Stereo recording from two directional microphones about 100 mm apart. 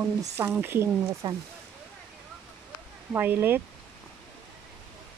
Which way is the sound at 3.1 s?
20° right (ahead or behind).